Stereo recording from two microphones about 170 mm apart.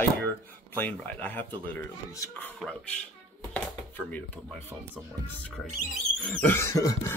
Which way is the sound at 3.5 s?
10° left (ahead or behind).